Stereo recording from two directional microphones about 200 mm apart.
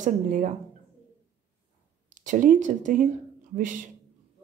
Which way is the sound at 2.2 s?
40° right (ahead or behind).